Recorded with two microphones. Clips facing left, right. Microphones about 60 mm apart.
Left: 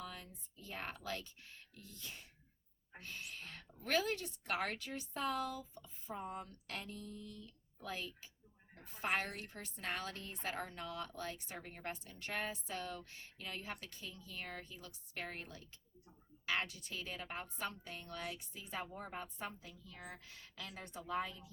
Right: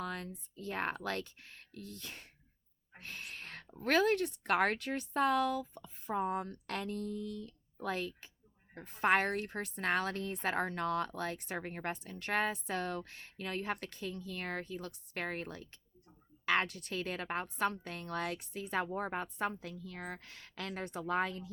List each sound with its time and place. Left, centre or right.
0.0 s a woman's voice: right